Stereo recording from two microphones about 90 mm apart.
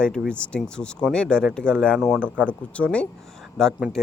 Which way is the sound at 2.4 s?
15° left (ahead or behind).